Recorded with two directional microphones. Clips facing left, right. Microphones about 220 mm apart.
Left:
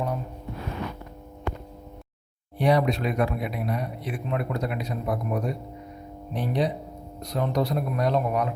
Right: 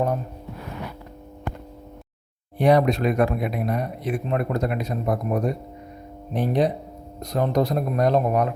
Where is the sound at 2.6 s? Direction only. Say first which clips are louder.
Right 4 dB; 50° right (ahead or behind).